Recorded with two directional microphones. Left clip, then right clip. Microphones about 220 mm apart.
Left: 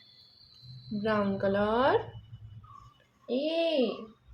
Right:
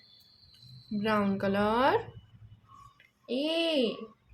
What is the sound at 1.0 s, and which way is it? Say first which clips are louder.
Speech: left 1 dB; 25° right (ahead or behind).